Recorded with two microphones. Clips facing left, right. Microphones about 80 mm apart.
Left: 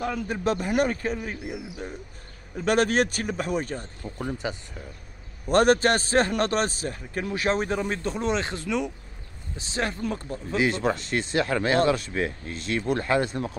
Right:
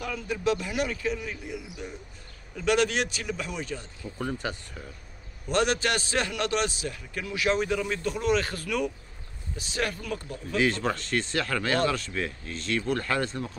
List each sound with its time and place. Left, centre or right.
0.0 s a man's voice: left
4.2 s speech: centre
5.5 s a man's voice: left
10.6 s speech: centre